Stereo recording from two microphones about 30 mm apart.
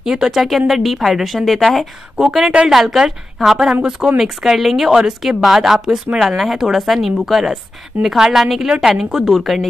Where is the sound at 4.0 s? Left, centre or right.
Centre.